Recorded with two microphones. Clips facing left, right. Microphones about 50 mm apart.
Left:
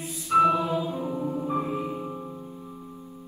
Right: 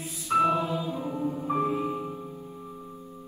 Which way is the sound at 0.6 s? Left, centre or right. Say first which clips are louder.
Left 3 dB; left.